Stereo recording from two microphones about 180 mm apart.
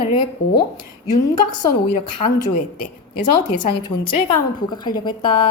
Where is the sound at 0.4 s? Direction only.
60° left (ahead or behind).